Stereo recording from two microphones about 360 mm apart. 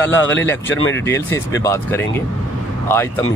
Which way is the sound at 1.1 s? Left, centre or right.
Centre.